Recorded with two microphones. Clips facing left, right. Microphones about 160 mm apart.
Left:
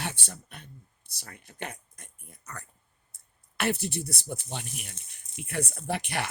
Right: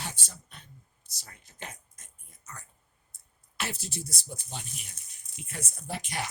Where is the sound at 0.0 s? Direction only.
60° left (ahead or behind).